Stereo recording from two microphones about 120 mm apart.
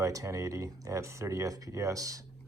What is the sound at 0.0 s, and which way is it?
Speech, 25° right (ahead or behind).